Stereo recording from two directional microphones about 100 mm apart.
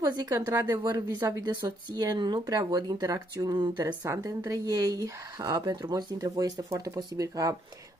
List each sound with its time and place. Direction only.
0.0 s speech: 40° right (ahead or behind)
0.5 s speech: 30° right (ahead or behind)
0.8 s speech: 40° right (ahead or behind)
3.8 s speech: 35° right (ahead or behind)